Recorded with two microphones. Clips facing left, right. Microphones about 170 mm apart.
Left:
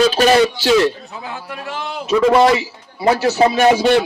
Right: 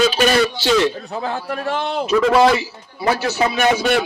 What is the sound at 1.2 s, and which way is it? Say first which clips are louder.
Speech: right 5 dB; 40° right (ahead or behind).